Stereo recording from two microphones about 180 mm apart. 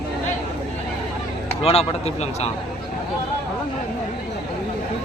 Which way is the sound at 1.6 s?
35° left (ahead or behind).